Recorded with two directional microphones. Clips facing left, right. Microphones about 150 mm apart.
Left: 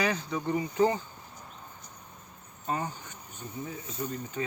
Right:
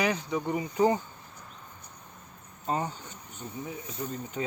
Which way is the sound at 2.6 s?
25° right (ahead or behind).